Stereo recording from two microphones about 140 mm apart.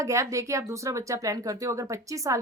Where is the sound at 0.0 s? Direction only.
20° right (ahead or behind).